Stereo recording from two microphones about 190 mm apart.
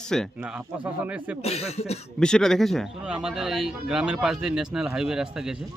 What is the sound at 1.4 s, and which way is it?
Speech, 30° left (ahead or behind).